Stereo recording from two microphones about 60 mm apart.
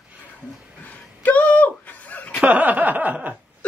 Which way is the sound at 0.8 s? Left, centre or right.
Left.